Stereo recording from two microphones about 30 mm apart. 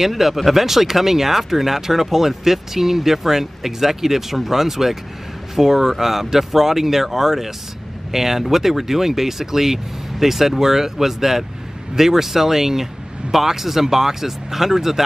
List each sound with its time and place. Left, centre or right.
0.0 s speech: centre